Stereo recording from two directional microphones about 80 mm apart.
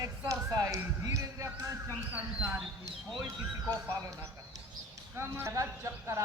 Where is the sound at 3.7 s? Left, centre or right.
Right.